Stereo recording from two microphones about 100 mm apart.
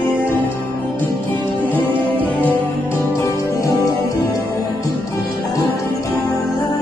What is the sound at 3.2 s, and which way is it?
Music, 30° left (ahead or behind).